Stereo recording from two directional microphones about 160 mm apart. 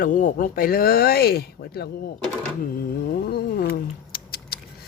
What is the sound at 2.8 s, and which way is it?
Cat, 70° left (ahead or behind).